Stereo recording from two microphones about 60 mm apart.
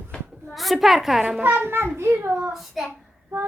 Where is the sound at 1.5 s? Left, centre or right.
Right.